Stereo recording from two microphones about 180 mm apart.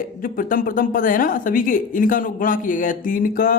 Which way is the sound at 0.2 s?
50° left (ahead or behind).